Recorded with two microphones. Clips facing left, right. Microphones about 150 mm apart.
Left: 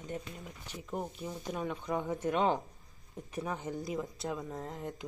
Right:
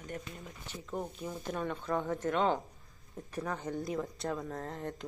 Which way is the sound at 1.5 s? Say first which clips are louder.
Right 1 dB; 10° left (ahead or behind).